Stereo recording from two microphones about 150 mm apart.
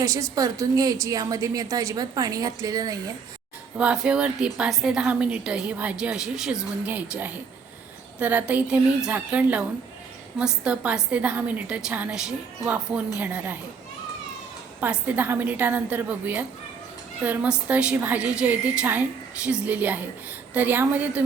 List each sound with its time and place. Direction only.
0.0 s a woman's voice: 20° right (ahead or behind)
3.8 s a woman's voice: 5° right (ahead or behind)
14.8 s a woman's voice: 10° right (ahead or behind)